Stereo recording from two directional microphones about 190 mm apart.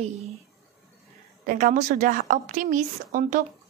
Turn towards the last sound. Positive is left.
turn(degrees=-45)  # may be behind; listen again after turning